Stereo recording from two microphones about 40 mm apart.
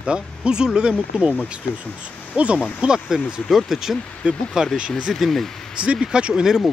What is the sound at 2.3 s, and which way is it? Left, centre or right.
Speech, right.